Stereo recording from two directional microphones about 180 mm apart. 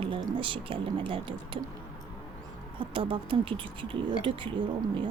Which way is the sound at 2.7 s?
30° right (ahead or behind).